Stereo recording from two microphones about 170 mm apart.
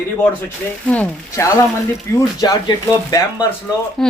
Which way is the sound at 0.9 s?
15° left (ahead or behind).